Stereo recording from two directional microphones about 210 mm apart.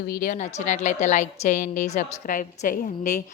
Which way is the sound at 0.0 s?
45° left (ahead or behind).